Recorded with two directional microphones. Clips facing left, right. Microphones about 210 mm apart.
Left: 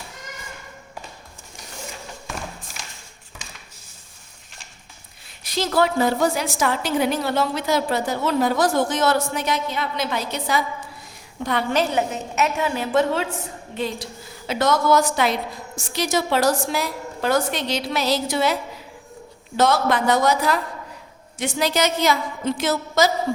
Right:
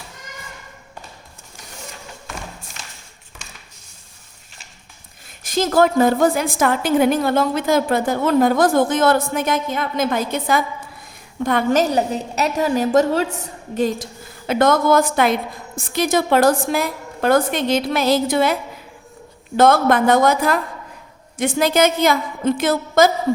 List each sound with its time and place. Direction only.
2.8 s a sound: 10° left (ahead or behind)
5.5 s a woman's voice: 50° right (ahead or behind)
19.5 s a woman's voice: 55° right (ahead or behind)